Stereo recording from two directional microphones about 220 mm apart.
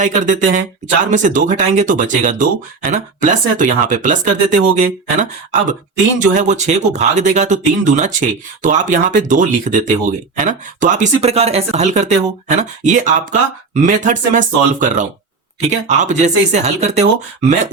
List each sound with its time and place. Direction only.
0.0 s speech: 35° right (ahead or behind)